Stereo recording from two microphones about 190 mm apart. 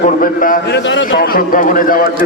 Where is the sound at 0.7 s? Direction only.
70° left (ahead or behind); by 2.1 s 45° left (ahead or behind).